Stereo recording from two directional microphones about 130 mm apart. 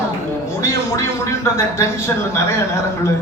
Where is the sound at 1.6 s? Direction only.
20° left (ahead or behind).